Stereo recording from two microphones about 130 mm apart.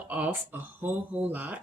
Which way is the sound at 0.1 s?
15° right (ahead or behind).